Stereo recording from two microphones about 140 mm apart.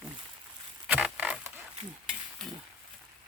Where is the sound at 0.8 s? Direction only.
10° right (ahead or behind).